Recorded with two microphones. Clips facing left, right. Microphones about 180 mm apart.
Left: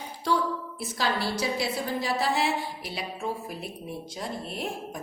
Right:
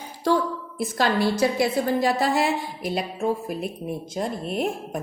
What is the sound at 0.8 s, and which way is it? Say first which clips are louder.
A woman's voice: right 8 dB; 50° right (ahead or behind).